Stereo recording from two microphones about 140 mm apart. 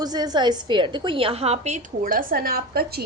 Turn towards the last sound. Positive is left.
turn(degrees=-90)